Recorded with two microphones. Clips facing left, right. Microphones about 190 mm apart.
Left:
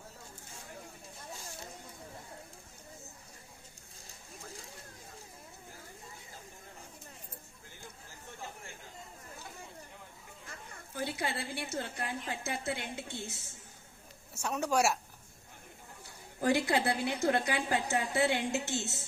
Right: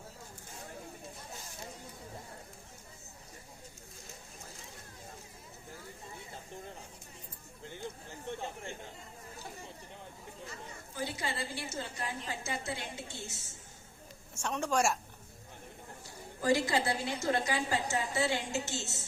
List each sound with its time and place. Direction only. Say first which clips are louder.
10.9 s a woman's voice: left 2 dB; 60° left (ahead or behind)
14.4 s a woman's voice: left 1 dB; 10° left (ahead or behind)
16.4 s a woman's voice: even; 60° left (ahead or behind)